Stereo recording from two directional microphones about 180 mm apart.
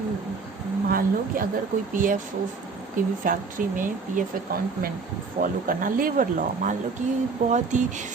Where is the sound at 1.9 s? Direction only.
50° right (ahead or behind).